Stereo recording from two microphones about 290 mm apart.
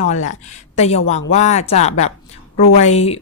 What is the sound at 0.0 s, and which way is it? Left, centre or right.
A woman's voice, left.